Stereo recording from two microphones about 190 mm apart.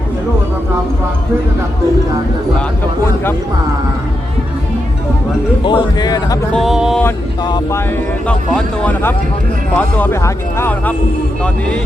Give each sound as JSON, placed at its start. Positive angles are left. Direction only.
{"t": 5.6, "sound": "a man's voice", "side_deg": 25}
{"t": 6.5, "sound": "speech", "side_deg": 0}
{"t": 7.4, "sound": "a man's voice", "side_deg": 20}
{"t": 8.3, "sound": "speech", "side_deg": 5}